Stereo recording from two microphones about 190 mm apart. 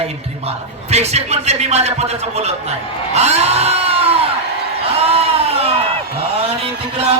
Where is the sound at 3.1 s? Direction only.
35° right (ahead or behind).